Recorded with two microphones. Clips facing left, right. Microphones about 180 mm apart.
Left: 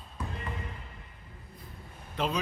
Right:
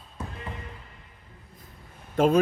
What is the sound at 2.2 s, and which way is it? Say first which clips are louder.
Speech: right 10 dB; 45° right (ahead or behind).